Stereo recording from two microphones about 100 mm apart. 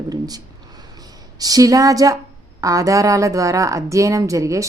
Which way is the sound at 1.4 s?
40° right (ahead or behind).